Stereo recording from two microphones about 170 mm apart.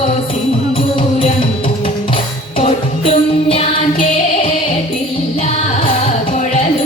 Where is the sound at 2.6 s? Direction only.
35° left (ahead or behind).